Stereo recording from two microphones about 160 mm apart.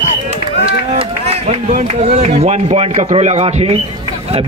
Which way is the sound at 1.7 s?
50° right (ahead or behind).